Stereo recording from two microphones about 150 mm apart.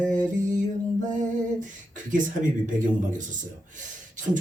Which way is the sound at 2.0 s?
60° right (ahead or behind).